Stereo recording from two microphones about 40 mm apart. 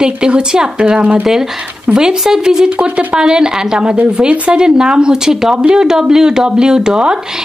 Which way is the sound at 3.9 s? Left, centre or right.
Right.